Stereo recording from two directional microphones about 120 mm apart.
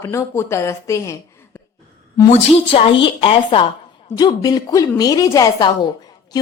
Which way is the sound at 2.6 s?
50° left (ahead or behind).